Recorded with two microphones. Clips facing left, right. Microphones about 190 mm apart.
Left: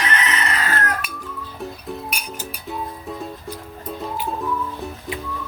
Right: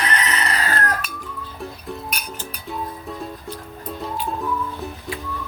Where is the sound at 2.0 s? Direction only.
10° left (ahead or behind).